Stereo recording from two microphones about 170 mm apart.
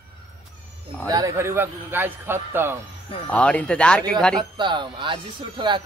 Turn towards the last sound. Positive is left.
turn(degrees=-30)  # may be behind; listen again after turning